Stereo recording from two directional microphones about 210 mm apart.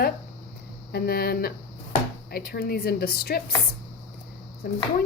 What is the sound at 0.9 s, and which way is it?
A woman's voice, 50° left (ahead or behind).